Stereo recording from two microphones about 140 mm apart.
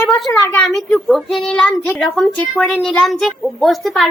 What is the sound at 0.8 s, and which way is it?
A woman's voice, centre (ahead or behind).